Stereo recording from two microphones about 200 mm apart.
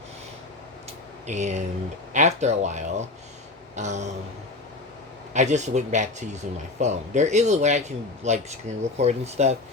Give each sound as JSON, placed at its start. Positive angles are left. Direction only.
{"t": 1.3, "sound": "speech", "side_deg": -35}
{"t": 5.3, "sound": "speech", "side_deg": -35}